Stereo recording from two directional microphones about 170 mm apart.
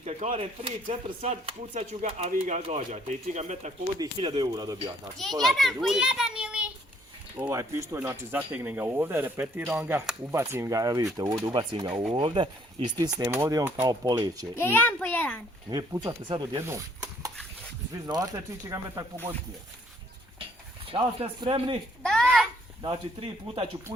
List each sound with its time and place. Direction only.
0.0 s speech: 40° right (ahead or behind)
3.9 s speech: 25° right (ahead or behind)
5.1 s a child's voice: centre (ahead or behind); by 14.4 s 20° right (ahead or behind)
14.5 s a child's voice: 10° left (ahead or behind)
15.7 s speech: 20° right (ahead or behind)
16.6 s stir: 15° right (ahead or behind)
17.9 s speech: 20° right (ahead or behind)
20.9 s speech: 30° right (ahead or behind)
22.0 s a sound: 5° left (ahead or behind)
22.8 s speech: 30° right (ahead or behind)